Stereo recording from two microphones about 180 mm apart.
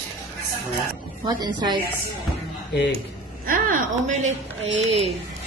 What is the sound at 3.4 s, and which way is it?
Speech, 50° right (ahead or behind).